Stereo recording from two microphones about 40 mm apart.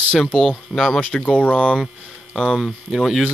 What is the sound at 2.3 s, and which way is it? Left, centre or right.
Speech, centre.